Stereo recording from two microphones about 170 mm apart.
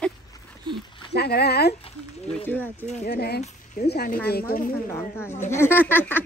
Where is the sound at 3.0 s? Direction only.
70° left (ahead or behind).